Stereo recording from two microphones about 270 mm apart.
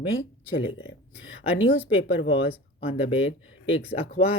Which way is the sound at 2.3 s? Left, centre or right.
Left.